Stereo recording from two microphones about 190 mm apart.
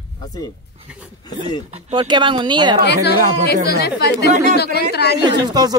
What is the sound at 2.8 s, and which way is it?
A woman's voice, 60° left (ahead or behind).